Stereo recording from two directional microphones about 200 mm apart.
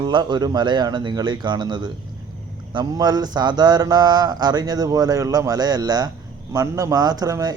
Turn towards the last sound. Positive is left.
turn(degrees=-20)  # may be behind; listen again after turning